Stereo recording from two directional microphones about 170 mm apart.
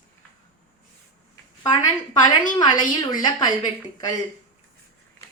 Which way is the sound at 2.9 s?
25° left (ahead or behind).